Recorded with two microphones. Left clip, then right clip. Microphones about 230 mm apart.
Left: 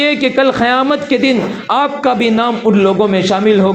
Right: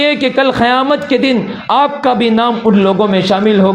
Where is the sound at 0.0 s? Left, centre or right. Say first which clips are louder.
Even; right.